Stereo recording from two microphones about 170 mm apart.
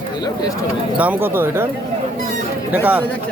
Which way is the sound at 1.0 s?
10° right (ahead or behind).